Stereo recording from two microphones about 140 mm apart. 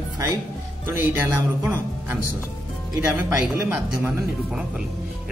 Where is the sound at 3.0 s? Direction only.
10° right (ahead or behind).